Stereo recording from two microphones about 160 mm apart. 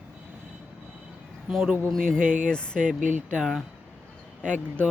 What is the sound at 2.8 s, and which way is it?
Speech, 55° right (ahead or behind).